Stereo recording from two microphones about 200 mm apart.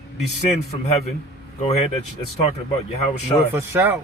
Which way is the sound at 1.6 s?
30° left (ahead or behind).